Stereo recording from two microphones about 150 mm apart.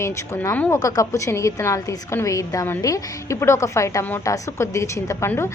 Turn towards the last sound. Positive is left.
turn(degrees=15)  # may be behind; listen again after turning